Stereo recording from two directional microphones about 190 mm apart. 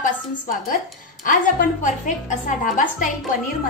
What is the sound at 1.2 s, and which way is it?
A woman's voice, 45° left (ahead or behind).